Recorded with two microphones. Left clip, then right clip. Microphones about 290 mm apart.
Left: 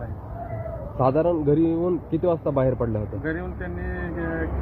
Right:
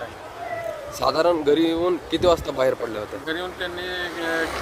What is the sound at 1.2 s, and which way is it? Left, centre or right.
Speech, centre.